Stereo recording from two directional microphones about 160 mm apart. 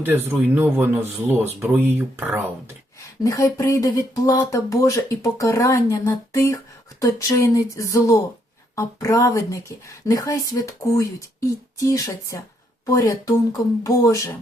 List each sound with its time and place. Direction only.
0.3 s speech: 15° right (ahead or behind)
3.2 s speech: 20° left (ahead or behind)